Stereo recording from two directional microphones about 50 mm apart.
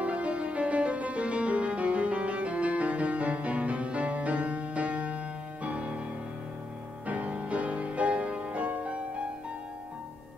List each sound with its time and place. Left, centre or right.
0.0 s music: right
7.1 s music: right